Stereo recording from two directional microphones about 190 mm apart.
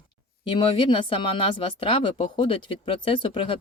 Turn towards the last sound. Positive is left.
turn(degrees=25)  # may be behind; listen again after turning